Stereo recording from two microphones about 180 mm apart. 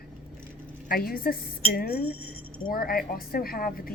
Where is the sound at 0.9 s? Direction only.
55° left (ahead or behind).